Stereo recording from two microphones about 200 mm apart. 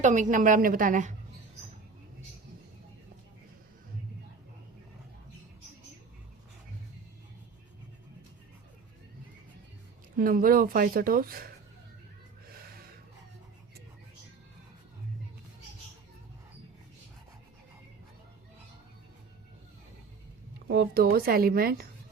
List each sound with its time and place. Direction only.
0.0 s a woman's voice: 40° right (ahead or behind)
10.2 s speech: 45° right (ahead or behind)
20.7 s speech: 50° right (ahead or behind)